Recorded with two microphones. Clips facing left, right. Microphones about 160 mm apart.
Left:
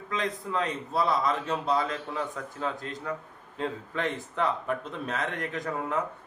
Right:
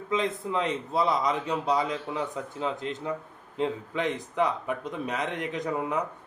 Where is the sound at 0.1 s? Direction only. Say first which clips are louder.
Right 3 dB; 20° right (ahead or behind).